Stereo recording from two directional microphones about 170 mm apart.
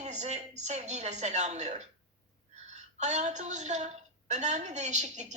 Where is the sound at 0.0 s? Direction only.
40° right (ahead or behind).